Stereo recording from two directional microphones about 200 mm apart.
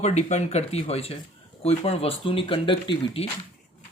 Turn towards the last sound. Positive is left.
turn(degrees=25)  # may be behind; listen again after turning